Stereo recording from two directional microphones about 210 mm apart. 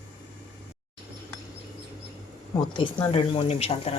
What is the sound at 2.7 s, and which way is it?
Speech, 25° left (ahead or behind).